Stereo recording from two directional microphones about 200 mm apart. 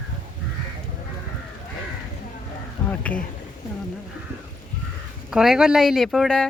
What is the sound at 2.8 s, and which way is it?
Insect, 5° left (ahead or behind).